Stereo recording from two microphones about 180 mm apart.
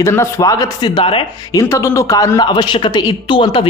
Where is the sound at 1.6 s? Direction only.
15° left (ahead or behind).